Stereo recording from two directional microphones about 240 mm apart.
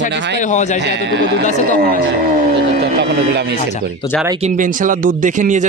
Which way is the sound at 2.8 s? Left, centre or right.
Right.